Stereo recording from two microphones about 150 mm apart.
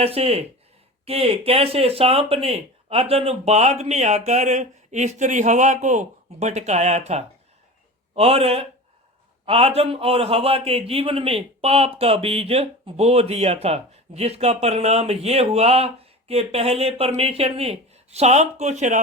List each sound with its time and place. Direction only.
0.0 s a man's voice: 40° right (ahead or behind)